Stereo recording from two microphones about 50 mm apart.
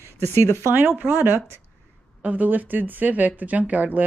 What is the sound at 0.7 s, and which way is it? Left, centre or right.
Speech, right.